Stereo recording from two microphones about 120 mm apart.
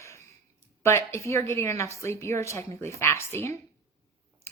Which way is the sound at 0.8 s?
25° left (ahead or behind).